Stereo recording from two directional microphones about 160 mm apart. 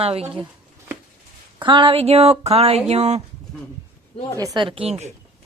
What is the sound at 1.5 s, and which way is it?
Speech, 30° right (ahead or behind).